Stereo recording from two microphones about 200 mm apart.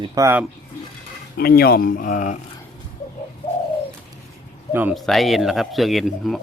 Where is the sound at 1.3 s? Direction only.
50° left (ahead or behind).